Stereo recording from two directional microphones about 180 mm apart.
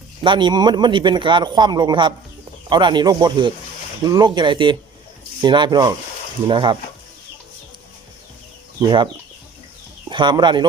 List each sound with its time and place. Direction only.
0.2 s speech: 25° right (ahead or behind)
10.1 s speech: 25° right (ahead or behind)